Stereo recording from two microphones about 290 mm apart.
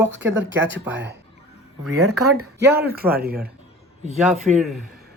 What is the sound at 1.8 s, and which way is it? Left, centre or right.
Speech, right.